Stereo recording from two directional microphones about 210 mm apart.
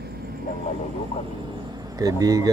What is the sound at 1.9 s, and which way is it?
Speech, 15° right (ahead or behind).